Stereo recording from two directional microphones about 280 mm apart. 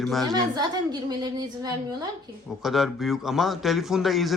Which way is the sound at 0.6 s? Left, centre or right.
Centre.